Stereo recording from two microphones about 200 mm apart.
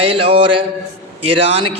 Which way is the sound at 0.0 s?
25° right (ahead or behind).